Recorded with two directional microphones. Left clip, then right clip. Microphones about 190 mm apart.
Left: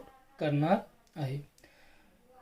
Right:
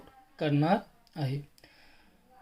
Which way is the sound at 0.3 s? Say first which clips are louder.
Right 1 dB; 35° right (ahead or behind).